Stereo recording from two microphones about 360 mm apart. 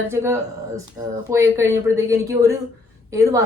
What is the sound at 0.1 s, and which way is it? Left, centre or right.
A woman's voice, centre.